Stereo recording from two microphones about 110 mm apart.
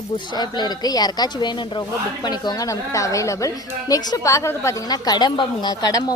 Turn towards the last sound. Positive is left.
turn(degrees=35)  # may be behind; listen again after turning